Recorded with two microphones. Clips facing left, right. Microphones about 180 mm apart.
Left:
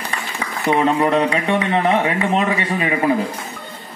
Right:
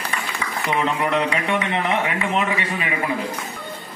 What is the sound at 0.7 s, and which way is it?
Speech, 35° left (ahead or behind).